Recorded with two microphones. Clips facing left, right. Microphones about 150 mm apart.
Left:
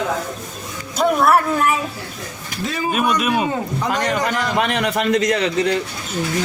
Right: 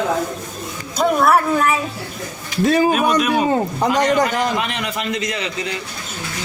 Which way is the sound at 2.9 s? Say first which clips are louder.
Right 2 dB; centre (ahead or behind).